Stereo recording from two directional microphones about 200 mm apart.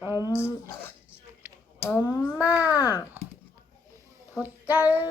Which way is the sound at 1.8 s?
15° left (ahead or behind).